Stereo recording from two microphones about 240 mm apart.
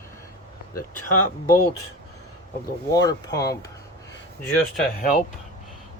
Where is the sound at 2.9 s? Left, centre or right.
Centre.